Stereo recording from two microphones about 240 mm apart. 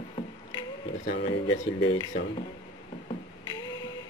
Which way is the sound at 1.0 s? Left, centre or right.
Left.